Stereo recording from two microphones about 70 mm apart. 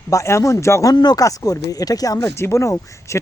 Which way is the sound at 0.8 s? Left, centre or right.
Left.